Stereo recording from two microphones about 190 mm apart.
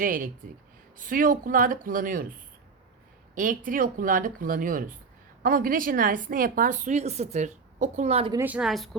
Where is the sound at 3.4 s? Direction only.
45° right (ahead or behind).